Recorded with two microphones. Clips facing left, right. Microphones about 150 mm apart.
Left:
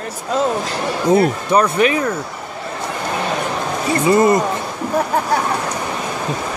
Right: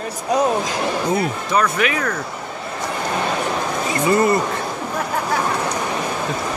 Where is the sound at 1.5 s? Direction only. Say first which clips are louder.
Left 4 dB; 30° left (ahead or behind).